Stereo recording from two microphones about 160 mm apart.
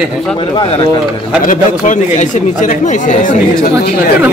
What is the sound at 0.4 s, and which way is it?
Speech, 30° left (ahead or behind).